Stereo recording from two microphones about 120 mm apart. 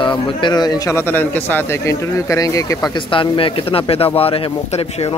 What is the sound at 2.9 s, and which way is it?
Speech, 45° left (ahead or behind).